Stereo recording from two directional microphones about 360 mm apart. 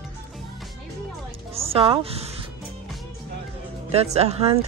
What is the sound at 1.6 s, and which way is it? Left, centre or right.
Speech, centre.